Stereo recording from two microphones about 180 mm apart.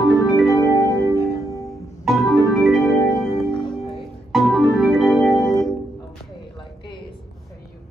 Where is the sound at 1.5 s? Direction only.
20° left (ahead or behind).